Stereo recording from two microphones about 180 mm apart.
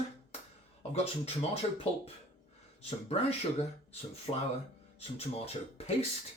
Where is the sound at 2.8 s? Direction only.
35° left (ahead or behind).